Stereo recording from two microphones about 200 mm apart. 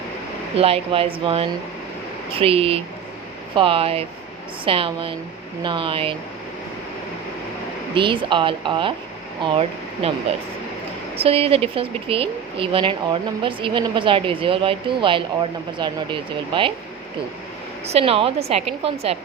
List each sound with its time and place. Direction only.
0.5 s speech: 30° right (ahead or behind)
7.9 s speech: 25° right (ahead or behind)
11.2 s speech: 30° right (ahead or behind)
17.8 s speech: 30° right (ahead or behind)